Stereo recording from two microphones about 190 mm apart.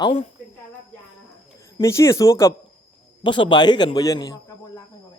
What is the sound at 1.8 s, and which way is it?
A man's voice, 15° left (ahead or behind).